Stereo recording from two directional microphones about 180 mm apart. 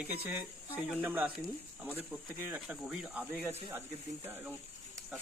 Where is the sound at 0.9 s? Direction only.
10° right (ahead or behind).